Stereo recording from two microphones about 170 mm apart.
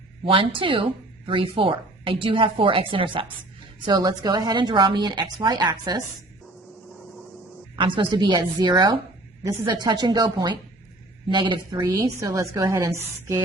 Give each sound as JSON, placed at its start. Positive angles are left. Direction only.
{"t": 0.3, "sound": "a woman's voice", "side_deg": -30}
{"t": 7.8, "sound": "a woman's voice", "side_deg": -25}